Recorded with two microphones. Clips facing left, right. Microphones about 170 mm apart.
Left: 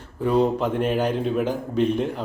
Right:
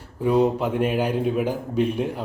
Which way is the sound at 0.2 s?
10° right (ahead or behind).